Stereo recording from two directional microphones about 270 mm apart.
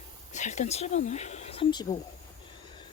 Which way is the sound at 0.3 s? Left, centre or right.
Left.